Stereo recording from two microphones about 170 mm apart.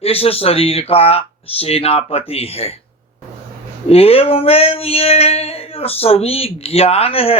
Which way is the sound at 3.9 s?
35° left (ahead or behind).